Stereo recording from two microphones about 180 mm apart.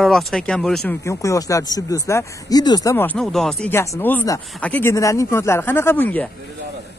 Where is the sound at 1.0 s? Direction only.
15° left (ahead or behind).